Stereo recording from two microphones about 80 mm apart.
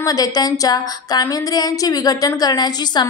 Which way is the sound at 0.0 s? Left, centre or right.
Left.